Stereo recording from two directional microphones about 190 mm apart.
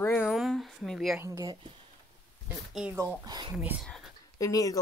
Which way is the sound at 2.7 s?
5° right (ahead or behind).